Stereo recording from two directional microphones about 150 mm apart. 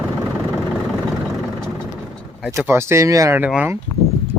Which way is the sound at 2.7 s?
15° right (ahead or behind).